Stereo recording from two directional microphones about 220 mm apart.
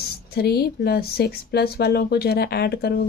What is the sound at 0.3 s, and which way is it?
Speech, 45° left (ahead or behind).